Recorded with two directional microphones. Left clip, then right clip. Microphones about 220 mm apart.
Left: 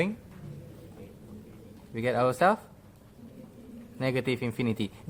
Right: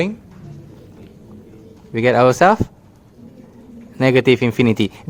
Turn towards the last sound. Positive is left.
turn(degrees=-40)  # may be behind; listen again after turning